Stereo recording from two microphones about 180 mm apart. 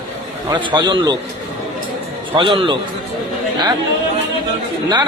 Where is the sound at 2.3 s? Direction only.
30° right (ahead or behind).